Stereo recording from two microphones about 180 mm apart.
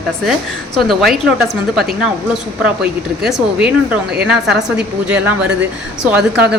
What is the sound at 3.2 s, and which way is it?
A woman's voice, 5° right (ahead or behind).